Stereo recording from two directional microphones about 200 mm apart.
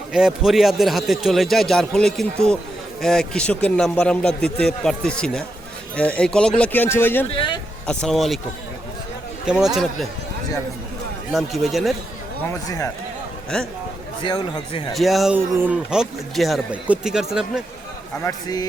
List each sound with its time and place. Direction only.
0.1 s speech: 5° right (ahead or behind)
9.5 s speech: centre (ahead or behind)
11.3 s speech: centre (ahead or behind)
12.5 s speech: 15° left (ahead or behind)
13.5 s speech: 5° left (ahead or behind)
14.2 s speech: 20° left (ahead or behind)
14.9 s speech: centre (ahead or behind)
18.3 s speech: 20° left (ahead or behind)